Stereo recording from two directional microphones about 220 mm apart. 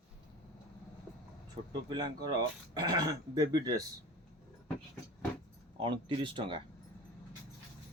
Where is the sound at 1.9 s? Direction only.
20° right (ahead or behind).